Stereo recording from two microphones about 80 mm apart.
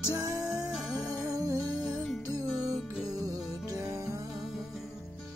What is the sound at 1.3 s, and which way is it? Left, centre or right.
Music, right.